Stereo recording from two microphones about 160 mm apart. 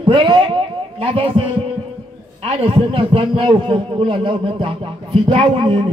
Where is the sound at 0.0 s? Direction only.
35° right (ahead or behind).